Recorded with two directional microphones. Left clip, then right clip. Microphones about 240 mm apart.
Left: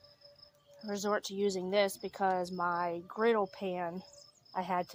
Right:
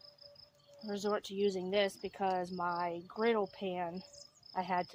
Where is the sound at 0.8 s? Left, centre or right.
Left.